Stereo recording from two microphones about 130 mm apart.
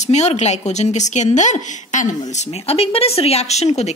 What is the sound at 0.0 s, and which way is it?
A woman's voice, 60° left (ahead or behind).